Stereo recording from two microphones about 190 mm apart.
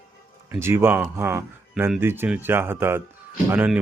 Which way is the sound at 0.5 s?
10° right (ahead or behind).